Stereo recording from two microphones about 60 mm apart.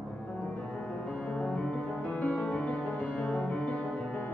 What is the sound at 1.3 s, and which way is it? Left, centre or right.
Music, centre.